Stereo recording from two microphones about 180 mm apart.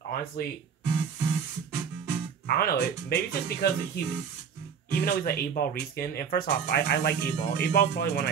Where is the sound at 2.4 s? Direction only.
60° left (ahead or behind).